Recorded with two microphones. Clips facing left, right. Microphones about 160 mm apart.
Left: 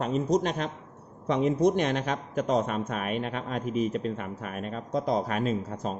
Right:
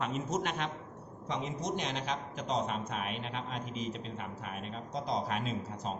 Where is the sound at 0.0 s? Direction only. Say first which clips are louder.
Left 8 dB; 35° left (ahead or behind).